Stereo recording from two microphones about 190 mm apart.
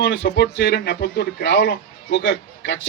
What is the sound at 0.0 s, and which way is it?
A man's voice, 65° left (ahead or behind).